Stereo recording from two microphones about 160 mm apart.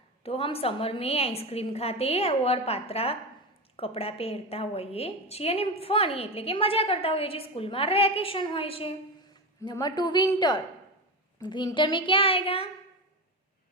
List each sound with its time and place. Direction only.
0.2 s a woman's voice: 35° left (ahead or behind)